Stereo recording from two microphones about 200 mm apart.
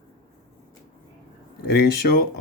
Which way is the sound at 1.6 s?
55° left (ahead or behind).